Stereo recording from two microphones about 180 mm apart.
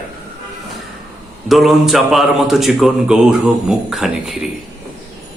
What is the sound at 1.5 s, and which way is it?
Speech, centre (ahead or behind).